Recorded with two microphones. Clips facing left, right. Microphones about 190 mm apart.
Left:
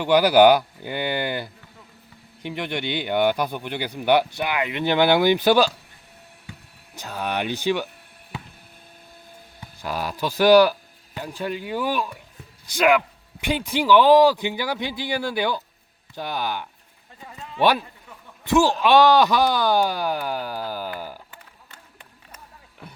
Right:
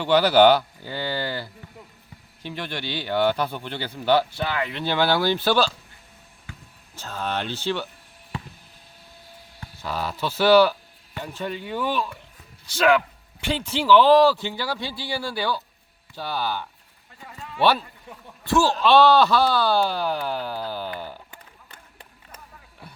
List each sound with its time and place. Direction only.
0.0 s a man's voice: 10° left (ahead or behind)
6.9 s a man's voice: 15° left (ahead or behind)
9.6 s a man's voice: 10° left (ahead or behind)
17.2 s a sound: 15° left (ahead or behind)
18.5 s a man's voice: 15° left (ahead or behind)